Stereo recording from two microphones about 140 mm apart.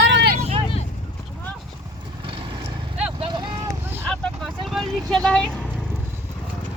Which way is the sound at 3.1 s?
35° right (ahead or behind).